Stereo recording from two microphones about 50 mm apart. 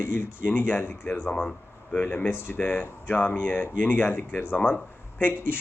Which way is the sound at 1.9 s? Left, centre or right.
Left.